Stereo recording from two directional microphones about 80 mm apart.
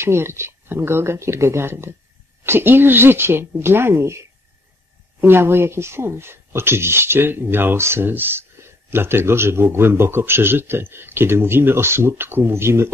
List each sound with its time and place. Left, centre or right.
0.0 s speech: right
5.2 s speech: right